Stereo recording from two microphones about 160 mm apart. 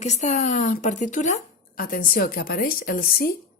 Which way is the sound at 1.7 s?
65° left (ahead or behind).